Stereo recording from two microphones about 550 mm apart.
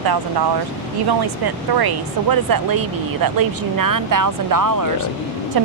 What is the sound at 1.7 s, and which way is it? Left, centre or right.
Speech, right.